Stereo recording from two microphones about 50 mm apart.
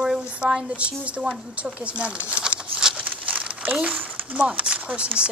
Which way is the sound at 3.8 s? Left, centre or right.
Right.